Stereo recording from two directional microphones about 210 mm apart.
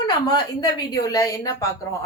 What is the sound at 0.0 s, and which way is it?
Speech, 20° left (ahead or behind).